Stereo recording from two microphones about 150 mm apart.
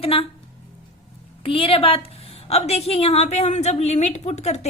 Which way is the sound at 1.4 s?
35° left (ahead or behind).